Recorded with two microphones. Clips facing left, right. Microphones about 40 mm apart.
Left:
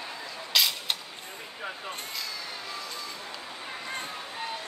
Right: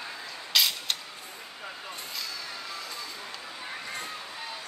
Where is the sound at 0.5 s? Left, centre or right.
Centre.